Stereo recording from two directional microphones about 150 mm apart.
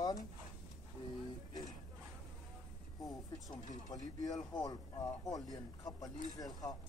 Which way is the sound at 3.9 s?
25° left (ahead or behind).